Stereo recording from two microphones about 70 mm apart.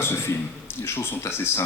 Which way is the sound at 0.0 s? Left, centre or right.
Left.